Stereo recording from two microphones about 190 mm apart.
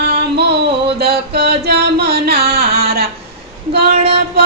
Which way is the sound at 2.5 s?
55° right (ahead or behind).